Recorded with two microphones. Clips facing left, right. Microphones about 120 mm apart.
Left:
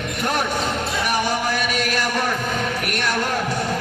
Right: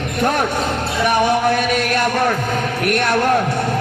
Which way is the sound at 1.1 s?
55° right (ahead or behind).